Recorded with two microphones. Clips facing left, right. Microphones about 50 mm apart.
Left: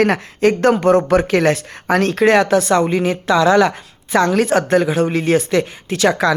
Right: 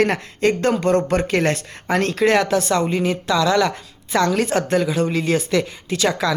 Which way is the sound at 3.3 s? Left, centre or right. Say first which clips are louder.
Left 6 dB; left.